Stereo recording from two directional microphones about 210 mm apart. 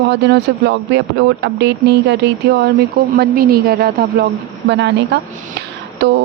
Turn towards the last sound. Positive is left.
turn(degrees=-55)  # may be behind; listen again after turning